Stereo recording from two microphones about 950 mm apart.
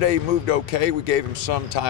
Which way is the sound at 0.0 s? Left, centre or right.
Left.